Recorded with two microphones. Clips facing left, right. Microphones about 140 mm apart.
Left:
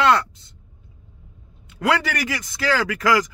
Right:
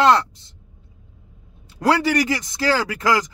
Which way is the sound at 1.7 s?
35° right (ahead or behind).